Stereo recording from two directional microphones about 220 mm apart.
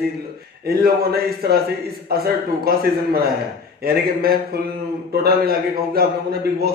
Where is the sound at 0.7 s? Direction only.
45° right (ahead or behind).